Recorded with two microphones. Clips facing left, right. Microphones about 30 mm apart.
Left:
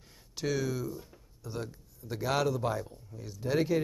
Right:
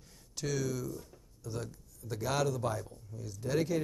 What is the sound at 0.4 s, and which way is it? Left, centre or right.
Speech, centre.